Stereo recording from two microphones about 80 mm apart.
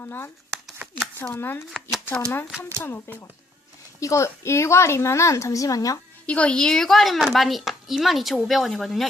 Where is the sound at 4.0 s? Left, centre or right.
Left.